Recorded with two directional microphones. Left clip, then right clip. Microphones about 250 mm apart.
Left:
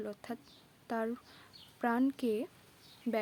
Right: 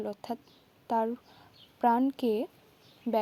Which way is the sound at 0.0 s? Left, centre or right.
Centre.